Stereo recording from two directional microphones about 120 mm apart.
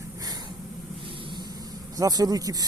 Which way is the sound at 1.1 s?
40° right (ahead or behind).